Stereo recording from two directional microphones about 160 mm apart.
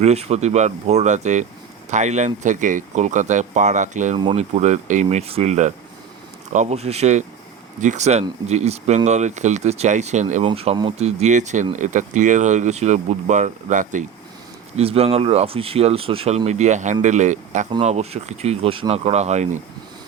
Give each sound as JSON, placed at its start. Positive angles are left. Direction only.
{"t": 0.0, "sound": "speech", "side_deg": -40}
{"t": 10.4, "sound": "speech", "side_deg": -35}
{"t": 14.8, "sound": "speech", "side_deg": -40}